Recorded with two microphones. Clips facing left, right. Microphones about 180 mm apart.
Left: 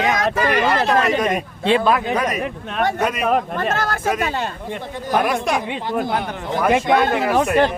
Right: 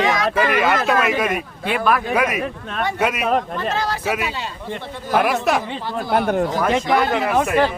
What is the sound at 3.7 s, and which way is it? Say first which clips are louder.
Speech: left 1 dB; 50° left (ahead or behind).